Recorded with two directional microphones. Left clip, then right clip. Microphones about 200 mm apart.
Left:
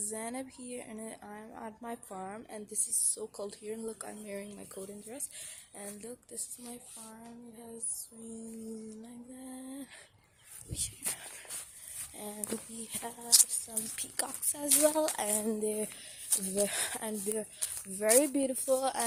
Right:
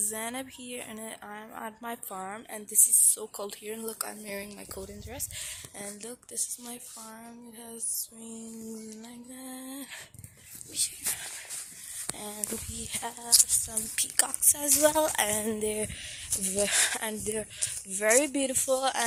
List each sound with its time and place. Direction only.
0.1 s a woman's voice: centre (ahead or behind)
6.0 s speech: 15° right (ahead or behind)
8.2 s speech: 10° right (ahead or behind)
10.8 s speech: 15° left (ahead or behind)
12.5 s a woman's voice: centre (ahead or behind)